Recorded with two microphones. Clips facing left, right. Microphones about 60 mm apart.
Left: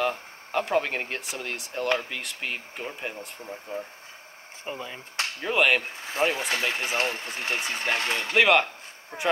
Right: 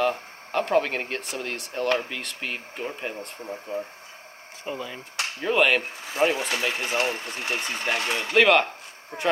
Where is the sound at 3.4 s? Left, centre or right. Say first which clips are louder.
Right 4 dB; right.